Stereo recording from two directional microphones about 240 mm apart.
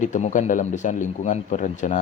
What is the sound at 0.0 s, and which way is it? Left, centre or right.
A man's voice, left.